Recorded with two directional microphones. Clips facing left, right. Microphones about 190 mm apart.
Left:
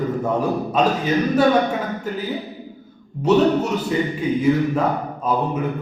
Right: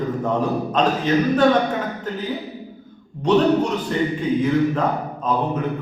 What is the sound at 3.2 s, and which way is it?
A man's voice, 5° left (ahead or behind).